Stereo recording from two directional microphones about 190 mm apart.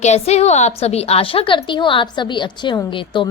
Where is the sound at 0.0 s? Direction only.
35° left (ahead or behind).